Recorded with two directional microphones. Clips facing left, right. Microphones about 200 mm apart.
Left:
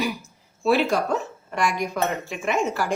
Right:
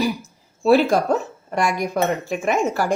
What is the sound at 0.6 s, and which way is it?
A woman's voice, 45° right (ahead or behind).